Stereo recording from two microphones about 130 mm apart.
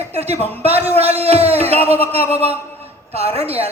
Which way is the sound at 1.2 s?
50° right (ahead or behind).